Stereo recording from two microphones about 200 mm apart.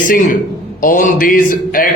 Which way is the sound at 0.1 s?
40° left (ahead or behind).